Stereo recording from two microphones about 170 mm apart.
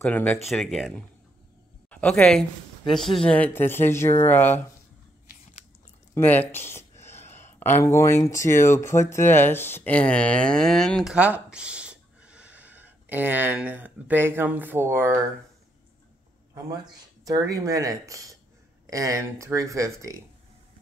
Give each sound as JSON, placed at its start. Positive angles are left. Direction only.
{"t": 0.0, "sound": "speech", "side_deg": 10}
{"t": 6.1, "sound": "speech", "side_deg": 10}
{"t": 11.1, "sound": "speech", "side_deg": -10}
{"t": 16.5, "sound": "speech", "side_deg": -25}